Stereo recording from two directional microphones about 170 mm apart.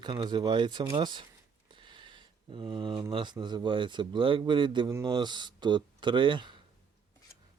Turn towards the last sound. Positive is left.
turn(degrees=-30)  # may be behind; listen again after turning